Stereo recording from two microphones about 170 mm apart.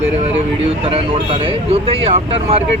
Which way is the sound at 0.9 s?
35° right (ahead or behind).